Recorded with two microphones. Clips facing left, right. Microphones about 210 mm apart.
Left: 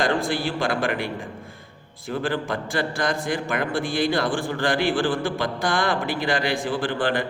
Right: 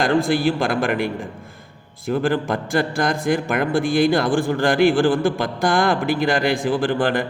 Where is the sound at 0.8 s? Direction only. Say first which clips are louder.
Right 4 dB; 45° right (ahead or behind).